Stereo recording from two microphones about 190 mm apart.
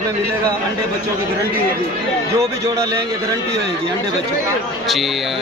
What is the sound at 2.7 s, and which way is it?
Speech, 20° right (ahead or behind).